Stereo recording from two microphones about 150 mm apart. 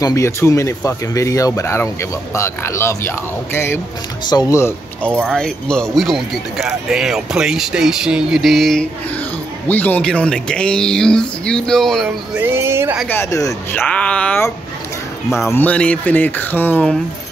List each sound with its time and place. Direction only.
0.0 s speech: 20° left (ahead or behind)
5.2 s speech: 5° left (ahead or behind)
9.7 s speech: 10° left (ahead or behind)
12.4 s speech: 15° right (ahead or behind)
13.1 s speech: 20° left (ahead or behind)
15.2 s speech: centre (ahead or behind)
15.5 s speech: 10° left (ahead or behind)